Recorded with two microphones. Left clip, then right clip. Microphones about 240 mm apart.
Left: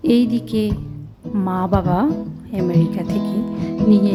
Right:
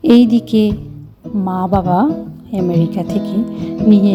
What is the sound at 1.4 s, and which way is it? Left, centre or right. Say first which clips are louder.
Speech: right 3 dB; left.